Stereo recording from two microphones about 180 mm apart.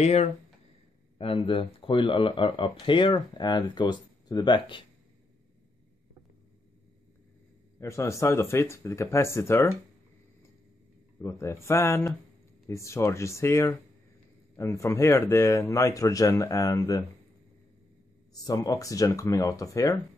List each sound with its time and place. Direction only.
0.0 s speech: 35° left (ahead or behind)
7.8 s speech: 15° left (ahead or behind)
11.1 s speech: 15° left (ahead or behind)
18.3 s speech: 20° left (ahead or behind)